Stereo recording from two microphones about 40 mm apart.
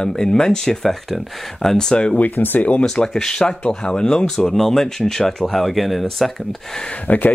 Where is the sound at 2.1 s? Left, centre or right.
Left.